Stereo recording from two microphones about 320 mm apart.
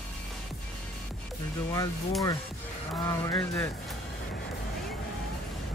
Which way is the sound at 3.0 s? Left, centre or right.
Centre.